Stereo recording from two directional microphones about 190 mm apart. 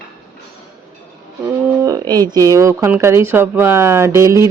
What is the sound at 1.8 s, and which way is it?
Speech, 20° right (ahead or behind).